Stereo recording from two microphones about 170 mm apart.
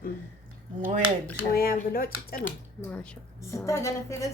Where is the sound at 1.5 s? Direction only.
60° left (ahead or behind).